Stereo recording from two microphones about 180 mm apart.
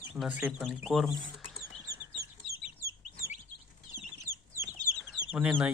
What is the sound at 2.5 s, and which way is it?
Chicken, 60° right (ahead or behind).